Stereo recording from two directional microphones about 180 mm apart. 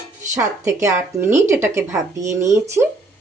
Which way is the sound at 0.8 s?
15° right (ahead or behind).